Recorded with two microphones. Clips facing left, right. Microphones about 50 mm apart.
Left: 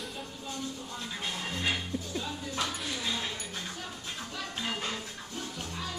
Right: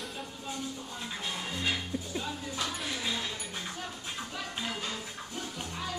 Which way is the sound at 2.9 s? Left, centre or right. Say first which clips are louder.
Even; centre.